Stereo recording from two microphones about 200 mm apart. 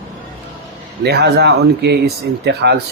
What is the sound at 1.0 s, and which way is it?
Speech, 55° right (ahead or behind).